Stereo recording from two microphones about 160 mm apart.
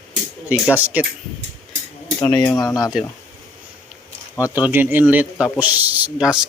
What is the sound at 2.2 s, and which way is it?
Speech, 15° left (ahead or behind).